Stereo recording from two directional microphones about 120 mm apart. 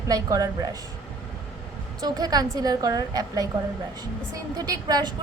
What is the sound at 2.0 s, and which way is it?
A woman's voice, 35° right (ahead or behind).